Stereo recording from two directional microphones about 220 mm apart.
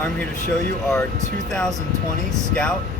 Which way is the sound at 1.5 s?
5° left (ahead or behind).